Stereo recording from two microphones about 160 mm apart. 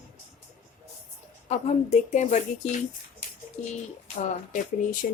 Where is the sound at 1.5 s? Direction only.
45° left (ahead or behind).